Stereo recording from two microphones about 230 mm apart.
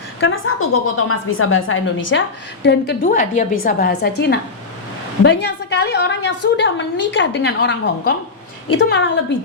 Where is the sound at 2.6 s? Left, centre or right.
Left.